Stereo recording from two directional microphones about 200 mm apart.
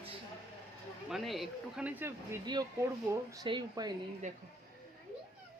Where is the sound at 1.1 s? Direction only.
Centre (ahead or behind); by 3.9 s 20° right (ahead or behind).